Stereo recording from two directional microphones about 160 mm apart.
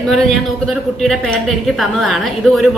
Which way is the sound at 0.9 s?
5° left (ahead or behind).